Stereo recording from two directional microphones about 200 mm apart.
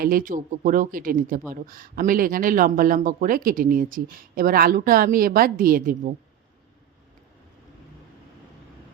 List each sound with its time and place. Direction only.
0.0 s speech: 45° right (ahead or behind)